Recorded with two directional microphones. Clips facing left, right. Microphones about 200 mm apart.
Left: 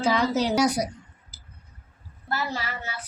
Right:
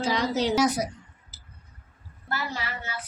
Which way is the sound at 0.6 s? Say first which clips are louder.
Left 1 dB; 10° left (ahead or behind).